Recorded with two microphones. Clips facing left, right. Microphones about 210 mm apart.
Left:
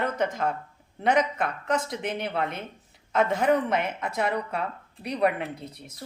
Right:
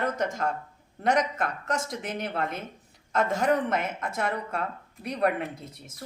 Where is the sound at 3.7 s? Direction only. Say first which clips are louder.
Left 2 dB; 50° right (ahead or behind).